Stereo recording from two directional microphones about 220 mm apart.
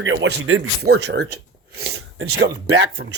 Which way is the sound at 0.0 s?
60° right (ahead or behind).